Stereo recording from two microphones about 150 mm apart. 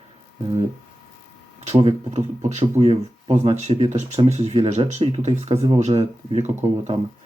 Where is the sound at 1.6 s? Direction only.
45° right (ahead or behind).